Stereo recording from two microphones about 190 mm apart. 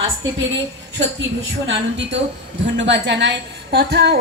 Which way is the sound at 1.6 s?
70° right (ahead or behind).